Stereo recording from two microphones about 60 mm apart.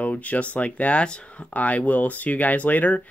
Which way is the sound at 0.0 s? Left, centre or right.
Left.